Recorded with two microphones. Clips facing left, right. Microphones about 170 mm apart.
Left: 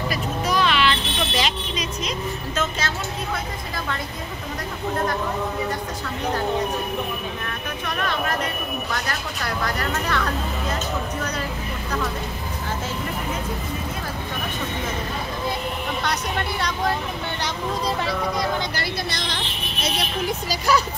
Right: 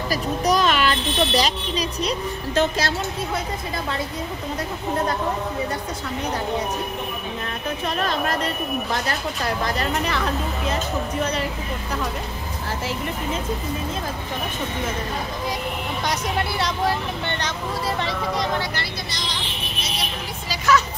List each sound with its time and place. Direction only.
0.1 s a child's voice: 40° right (ahead or behind)
7.8 s speech: 25° right (ahead or behind)
10.0 s speech: 10° right (ahead or behind)
16.1 s speech: 5° right (ahead or behind)
18.0 s speech: centre (ahead or behind)
18.8 s speech: 55° left (ahead or behind)
20.4 s speech: 35° left (ahead or behind)